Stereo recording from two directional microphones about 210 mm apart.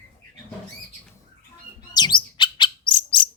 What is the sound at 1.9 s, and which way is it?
Bird, 20° left (ahead or behind).